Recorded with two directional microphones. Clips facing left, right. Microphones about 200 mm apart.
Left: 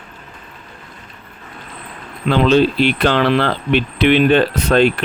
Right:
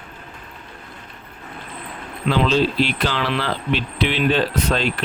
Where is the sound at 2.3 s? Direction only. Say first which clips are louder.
Left 5 dB; 60° left (ahead or behind).